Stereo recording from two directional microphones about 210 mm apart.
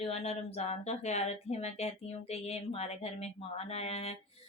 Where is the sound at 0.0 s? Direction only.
30° left (ahead or behind).